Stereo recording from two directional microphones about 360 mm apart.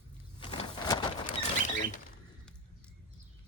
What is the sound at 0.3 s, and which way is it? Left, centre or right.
Walk, centre.